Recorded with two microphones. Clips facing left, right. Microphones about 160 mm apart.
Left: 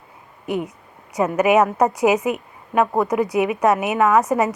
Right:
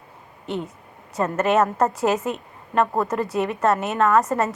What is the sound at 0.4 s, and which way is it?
A woman's voice, 15° left (ahead or behind).